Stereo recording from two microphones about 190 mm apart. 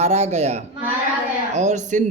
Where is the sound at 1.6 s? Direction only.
40° right (ahead or behind).